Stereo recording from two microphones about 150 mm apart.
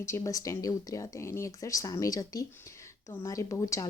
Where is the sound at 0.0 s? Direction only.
20° left (ahead or behind).